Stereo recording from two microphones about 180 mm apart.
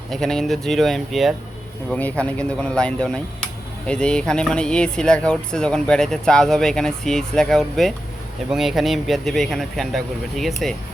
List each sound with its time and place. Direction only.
0.1 s speech: centre (ahead or behind)